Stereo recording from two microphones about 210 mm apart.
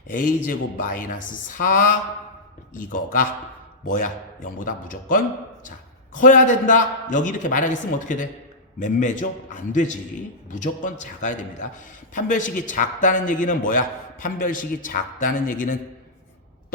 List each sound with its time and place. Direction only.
0.1 s a man's voice: 40° left (ahead or behind)